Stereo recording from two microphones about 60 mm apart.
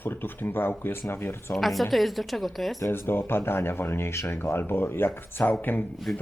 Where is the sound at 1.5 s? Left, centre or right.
Centre.